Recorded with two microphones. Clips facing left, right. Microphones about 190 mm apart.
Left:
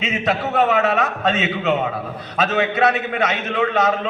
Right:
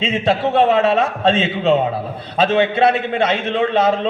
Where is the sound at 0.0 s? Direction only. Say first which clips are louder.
Right 4 dB; 30° right (ahead or behind).